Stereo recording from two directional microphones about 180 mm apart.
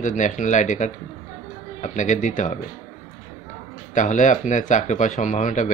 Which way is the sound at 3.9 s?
45° left (ahead or behind).